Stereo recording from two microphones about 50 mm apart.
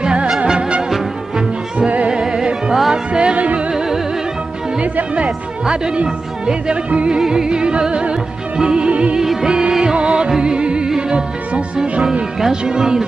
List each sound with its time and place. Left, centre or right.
0.0 s music: centre
0.8 s music: centre; by 3.7 s right
3.7 s music: centre
4.9 s speech: right
5.7 s music: centre
7.2 s music: centre
9.2 s music: centre
12.0 s music: centre